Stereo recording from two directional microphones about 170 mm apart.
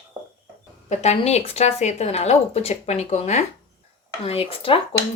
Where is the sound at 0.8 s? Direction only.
40° left (ahead or behind).